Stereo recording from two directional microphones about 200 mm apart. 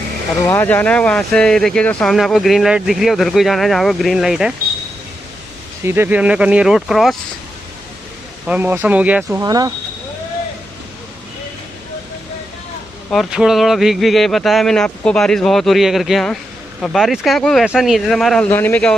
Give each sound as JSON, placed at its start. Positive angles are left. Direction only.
{"t": 0.5, "sound": "speech", "side_deg": 10}
{"t": 5.9, "sound": "speech", "side_deg": -10}
{"t": 8.5, "sound": "speech", "side_deg": -10}
{"t": 9.4, "sound": "speech", "side_deg": -20}
{"t": 13.1, "sound": "speech", "side_deg": 0}